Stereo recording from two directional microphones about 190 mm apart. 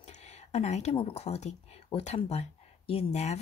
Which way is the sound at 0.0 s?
35° left (ahead or behind).